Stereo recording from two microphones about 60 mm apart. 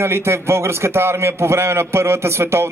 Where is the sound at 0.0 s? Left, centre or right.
Right.